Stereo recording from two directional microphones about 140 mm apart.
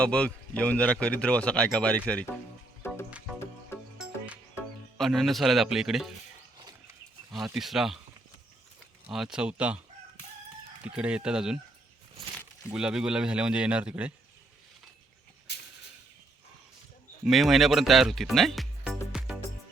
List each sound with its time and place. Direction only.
0.0 s speech: 5° left (ahead or behind)
2.8 s music: 15° left (ahead or behind)
3.9 s music: 5° right (ahead or behind)
4.9 s speech: centre (ahead or behind)
7.4 s speech: 5° right (ahead or behind)
9.0 s speech: 5° right (ahead or behind)
10.8 s speech: 10° right (ahead or behind)
12.7 s speech: 5° right (ahead or behind)
17.2 s speech: centre (ahead or behind)